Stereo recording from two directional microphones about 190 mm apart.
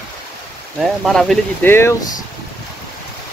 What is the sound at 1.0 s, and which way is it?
Speech, centre (ahead or behind).